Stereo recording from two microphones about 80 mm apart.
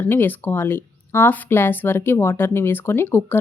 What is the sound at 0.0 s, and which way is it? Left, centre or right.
Speech, left.